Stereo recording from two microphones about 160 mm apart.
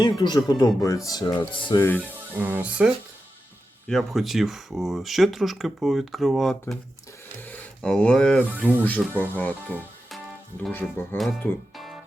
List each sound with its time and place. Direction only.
0.0 s speech: 25° left (ahead or behind)
1.7 s speech: 15° left (ahead or behind)
2.4 s speech: 15° right (ahead or behind); by 9.6 s 10° left (ahead or behind)
10.7 s speech: 15° left (ahead or behind)
11.2 s speech: centre (ahead or behind)